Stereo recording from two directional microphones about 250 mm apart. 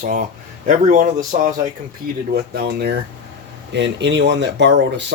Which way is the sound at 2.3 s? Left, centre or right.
Right.